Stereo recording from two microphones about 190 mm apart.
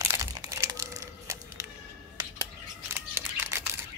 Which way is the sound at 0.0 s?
15° right (ahead or behind).